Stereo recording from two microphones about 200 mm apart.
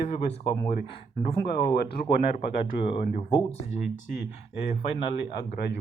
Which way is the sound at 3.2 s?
30° left (ahead or behind).